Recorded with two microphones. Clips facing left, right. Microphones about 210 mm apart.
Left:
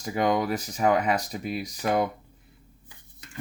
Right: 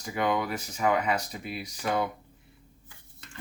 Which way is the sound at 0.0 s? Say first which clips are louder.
Left 4 dB; 40° left (ahead or behind).